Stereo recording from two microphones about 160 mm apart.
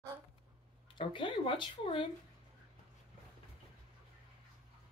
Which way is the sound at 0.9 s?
30° left (ahead or behind).